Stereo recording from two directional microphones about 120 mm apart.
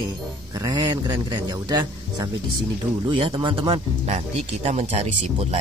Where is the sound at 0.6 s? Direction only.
35° right (ahead or behind).